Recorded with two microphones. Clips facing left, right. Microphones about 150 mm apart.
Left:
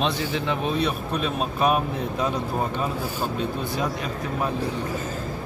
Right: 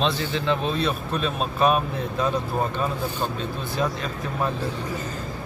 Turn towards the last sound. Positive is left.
turn(degrees=15)  # may be behind; listen again after turning